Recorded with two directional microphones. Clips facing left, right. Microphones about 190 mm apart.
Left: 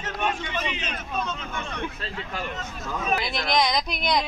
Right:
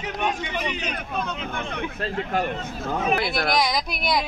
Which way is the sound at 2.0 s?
55° right (ahead or behind).